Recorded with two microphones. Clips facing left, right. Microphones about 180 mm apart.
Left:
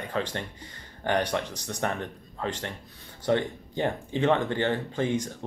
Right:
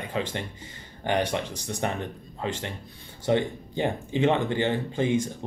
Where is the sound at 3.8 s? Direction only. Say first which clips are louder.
Right 2 dB; 10° right (ahead or behind).